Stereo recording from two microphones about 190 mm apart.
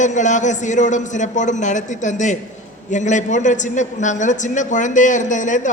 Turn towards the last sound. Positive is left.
turn(degrees=40)  # may be behind; listen again after turning